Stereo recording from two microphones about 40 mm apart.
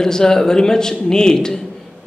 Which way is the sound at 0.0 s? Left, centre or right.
Centre.